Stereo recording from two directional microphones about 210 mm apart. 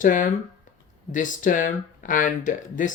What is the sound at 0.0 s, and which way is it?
Speech, 40° left (ahead or behind).